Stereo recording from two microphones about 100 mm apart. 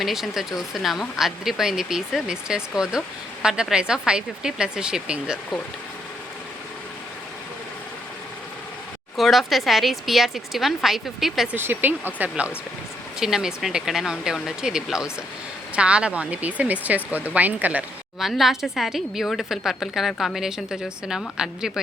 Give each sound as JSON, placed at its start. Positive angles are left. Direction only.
{"t": 0.0, "sound": "a woman's voice", "side_deg": -5}
{"t": 9.1, "sound": "a woman's voice", "side_deg": 0}
{"t": 11.5, "sound": "speech", "side_deg": -20}
{"t": 13.1, "sound": "a woman's voice", "side_deg": -5}
{"t": 18.2, "sound": "a woman's voice", "side_deg": -5}